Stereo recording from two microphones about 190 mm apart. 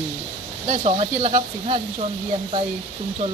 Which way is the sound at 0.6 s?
35° right (ahead or behind).